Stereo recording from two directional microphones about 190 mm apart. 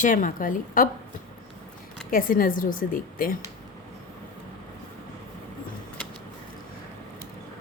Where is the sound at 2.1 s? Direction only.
45° left (ahead or behind).